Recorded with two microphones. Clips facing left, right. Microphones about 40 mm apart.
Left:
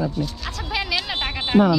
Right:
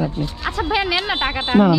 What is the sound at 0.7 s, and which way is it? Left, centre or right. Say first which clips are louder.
Speech: right 4 dB; right.